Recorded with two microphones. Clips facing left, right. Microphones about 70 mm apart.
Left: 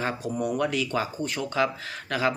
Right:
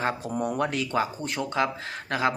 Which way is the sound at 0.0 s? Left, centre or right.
Right.